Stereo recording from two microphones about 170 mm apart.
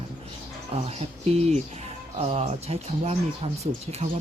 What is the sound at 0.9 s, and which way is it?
Speech, 40° right (ahead or behind).